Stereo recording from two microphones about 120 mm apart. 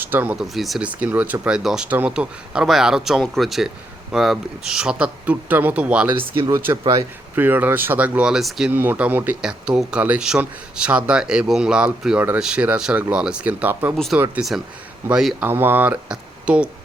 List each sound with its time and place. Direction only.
0.0 s speech: 15° right (ahead or behind)
0.4 s speech: centre (ahead or behind)
0.9 s speech: 15° right (ahead or behind)
6.7 s speech: 35° right (ahead or behind)
7.3 s speech: 15° right (ahead or behind)
8.7 s speech: 15° right (ahead or behind)
13.9 s speech: centre (ahead or behind)
15.4 s speech: 20° right (ahead or behind)